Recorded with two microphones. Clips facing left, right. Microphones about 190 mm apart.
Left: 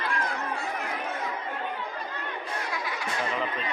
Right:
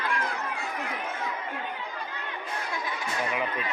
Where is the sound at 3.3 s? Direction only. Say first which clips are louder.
Even; 10° right (ahead or behind).